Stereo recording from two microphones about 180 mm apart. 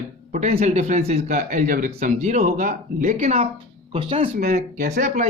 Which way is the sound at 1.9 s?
35° right (ahead or behind).